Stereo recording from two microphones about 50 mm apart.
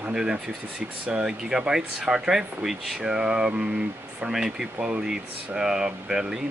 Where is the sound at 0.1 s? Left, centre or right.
Centre.